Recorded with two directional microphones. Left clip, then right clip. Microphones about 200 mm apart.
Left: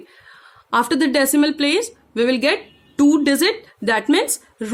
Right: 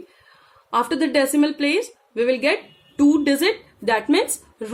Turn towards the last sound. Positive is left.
turn(degrees=55)  # may be behind; listen again after turning